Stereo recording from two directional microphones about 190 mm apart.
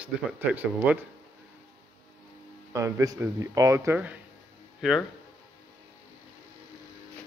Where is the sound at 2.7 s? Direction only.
15° right (ahead or behind).